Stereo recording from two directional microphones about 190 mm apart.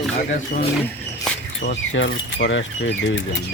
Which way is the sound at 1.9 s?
80° left.